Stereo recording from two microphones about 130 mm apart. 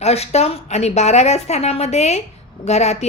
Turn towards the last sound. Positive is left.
turn(degrees=55)  # may be behind; listen again after turning